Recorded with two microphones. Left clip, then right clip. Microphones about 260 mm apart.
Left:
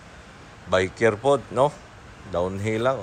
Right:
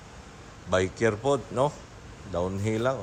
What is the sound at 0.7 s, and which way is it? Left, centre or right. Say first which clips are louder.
Speech: left 4 dB; centre.